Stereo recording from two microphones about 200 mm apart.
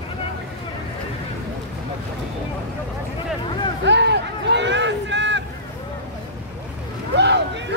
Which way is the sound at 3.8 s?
60° right (ahead or behind).